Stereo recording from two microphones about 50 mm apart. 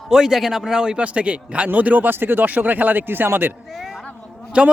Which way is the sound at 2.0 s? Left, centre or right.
Right.